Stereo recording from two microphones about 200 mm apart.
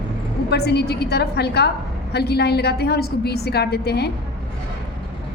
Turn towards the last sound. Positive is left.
turn(degrees=55)  # may be behind; listen again after turning